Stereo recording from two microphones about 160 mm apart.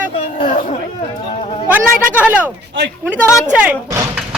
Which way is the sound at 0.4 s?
60° left (ahead or behind).